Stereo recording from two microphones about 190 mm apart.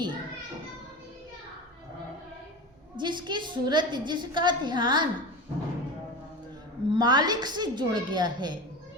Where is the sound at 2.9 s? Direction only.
25° right (ahead or behind).